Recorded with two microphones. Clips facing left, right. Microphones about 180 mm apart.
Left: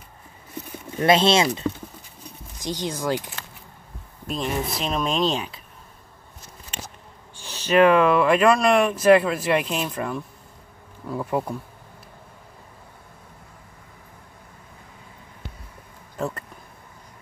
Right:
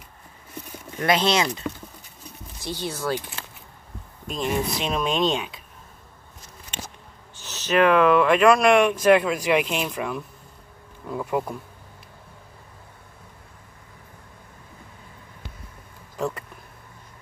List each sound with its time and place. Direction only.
0.9 s speech: 25° left (ahead or behind)
4.3 s speech: centre (ahead or behind)
7.4 s speech: 10° left (ahead or behind)
16.2 s a sound: centre (ahead or behind)